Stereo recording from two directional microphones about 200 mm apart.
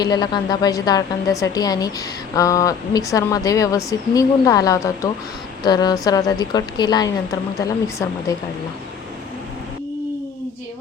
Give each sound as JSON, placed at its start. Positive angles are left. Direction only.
{"t": 0.0, "sound": "a woman's voice", "side_deg": 20}